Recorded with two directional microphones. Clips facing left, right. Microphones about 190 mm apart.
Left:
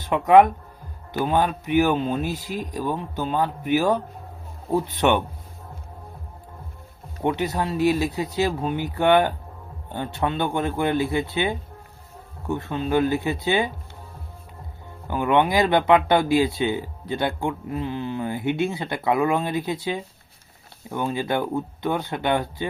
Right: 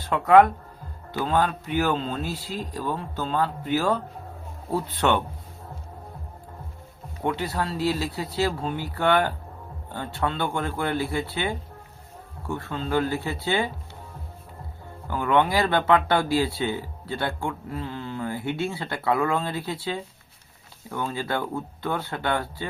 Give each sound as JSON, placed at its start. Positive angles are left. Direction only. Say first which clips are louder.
{"t": 0.0, "sound": "speech", "louder": "left 2 dB", "side_deg": 15}
{"t": 7.2, "sound": "speech", "louder": "left 3 dB", "side_deg": 20}
{"t": 15.0, "sound": "speech", "louder": "left 2 dB", "side_deg": 20}